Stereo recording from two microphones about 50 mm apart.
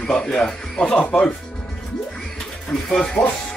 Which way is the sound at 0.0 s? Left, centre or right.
Centre.